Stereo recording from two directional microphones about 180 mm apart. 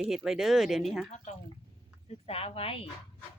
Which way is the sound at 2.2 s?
30° left (ahead or behind).